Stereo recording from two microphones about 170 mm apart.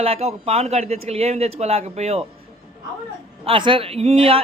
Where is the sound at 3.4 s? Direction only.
30° right (ahead or behind).